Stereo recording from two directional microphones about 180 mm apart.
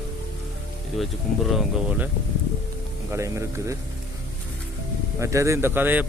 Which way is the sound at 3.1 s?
15° right (ahead or behind).